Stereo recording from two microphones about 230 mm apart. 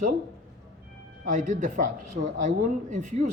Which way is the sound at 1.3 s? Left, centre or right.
Right.